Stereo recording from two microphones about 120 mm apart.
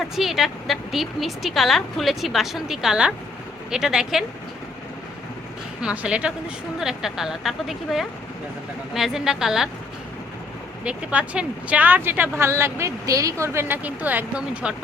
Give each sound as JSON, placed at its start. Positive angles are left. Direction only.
{"t": 0.2, "sound": "a woman's voice", "side_deg": 0}
{"t": 5.8, "sound": "a woman's voice", "side_deg": -10}
{"t": 10.8, "sound": "speech", "side_deg": -10}